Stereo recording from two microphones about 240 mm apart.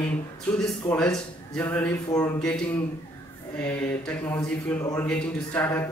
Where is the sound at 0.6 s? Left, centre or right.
Centre.